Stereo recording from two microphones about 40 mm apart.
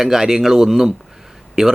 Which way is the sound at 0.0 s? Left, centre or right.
Centre.